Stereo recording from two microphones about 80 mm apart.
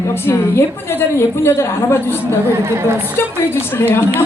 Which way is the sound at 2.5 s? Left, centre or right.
Right.